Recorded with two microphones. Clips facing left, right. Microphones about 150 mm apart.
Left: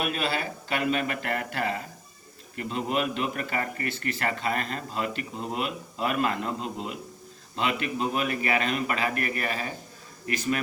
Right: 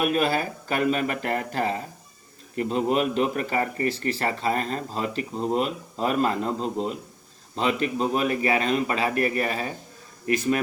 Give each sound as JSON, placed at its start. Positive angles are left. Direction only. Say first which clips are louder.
{"t": 0.0, "sound": "a man's voice", "louder": "right 6 dB", "side_deg": -45}